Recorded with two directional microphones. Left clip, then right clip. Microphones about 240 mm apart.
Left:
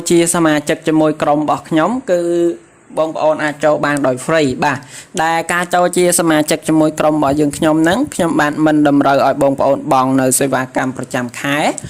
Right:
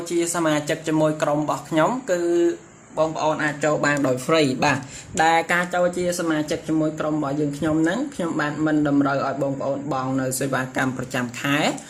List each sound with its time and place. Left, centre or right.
0.0 s speech: left